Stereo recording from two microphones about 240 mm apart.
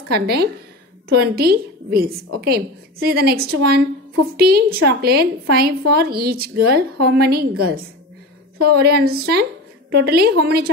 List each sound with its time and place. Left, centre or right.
0.1 s a woman's voice: right